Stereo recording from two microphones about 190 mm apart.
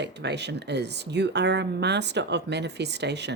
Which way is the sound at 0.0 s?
65° right (ahead or behind).